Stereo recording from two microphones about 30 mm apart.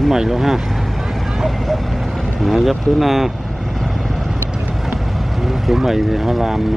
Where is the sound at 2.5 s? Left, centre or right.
Centre.